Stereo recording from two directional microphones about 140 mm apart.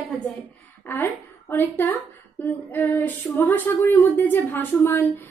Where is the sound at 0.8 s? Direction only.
15° left (ahead or behind).